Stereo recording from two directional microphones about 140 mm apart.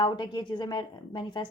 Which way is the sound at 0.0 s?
35° left (ahead or behind).